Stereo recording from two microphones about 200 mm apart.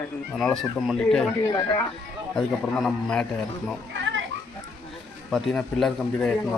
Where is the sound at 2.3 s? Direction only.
Centre (ahead or behind).